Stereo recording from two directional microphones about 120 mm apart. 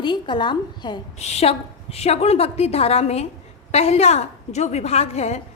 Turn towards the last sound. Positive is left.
turn(degrees=65)  # may be behind; listen again after turning